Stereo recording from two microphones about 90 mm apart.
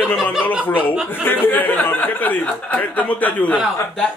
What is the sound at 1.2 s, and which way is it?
Speech, 25° left (ahead or behind).